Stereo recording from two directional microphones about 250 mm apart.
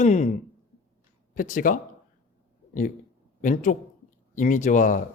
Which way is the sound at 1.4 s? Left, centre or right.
Left.